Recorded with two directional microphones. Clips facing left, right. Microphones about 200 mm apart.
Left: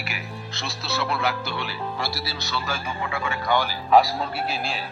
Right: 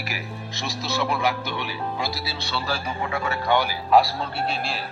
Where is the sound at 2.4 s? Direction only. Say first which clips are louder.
Right 3 dB; 30° right (ahead or behind).